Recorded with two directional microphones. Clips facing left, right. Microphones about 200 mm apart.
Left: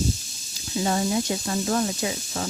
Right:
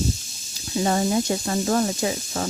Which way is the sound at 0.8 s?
45° right (ahead or behind).